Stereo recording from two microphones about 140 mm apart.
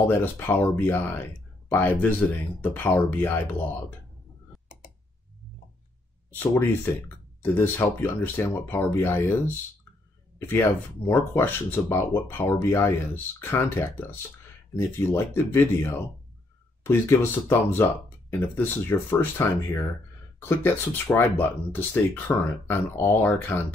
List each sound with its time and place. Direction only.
0.0 s speech: 15° left (ahead or behind)
6.3 s speech: 15° left (ahead or behind)
11.1 s speech: 15° left (ahead or behind)